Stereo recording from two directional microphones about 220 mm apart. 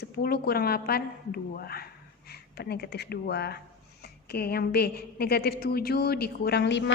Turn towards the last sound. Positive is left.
turn(degrees=50)  # may be behind; listen again after turning